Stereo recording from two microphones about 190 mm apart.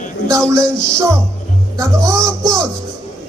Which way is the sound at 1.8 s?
15° right (ahead or behind).